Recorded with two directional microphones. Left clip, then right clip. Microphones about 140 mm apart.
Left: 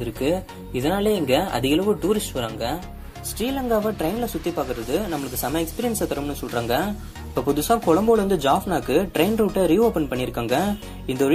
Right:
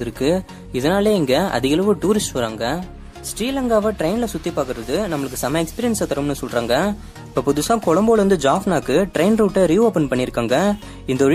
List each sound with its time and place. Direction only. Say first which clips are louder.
0.0 s speech: right 4 dB; 30° right (ahead or behind)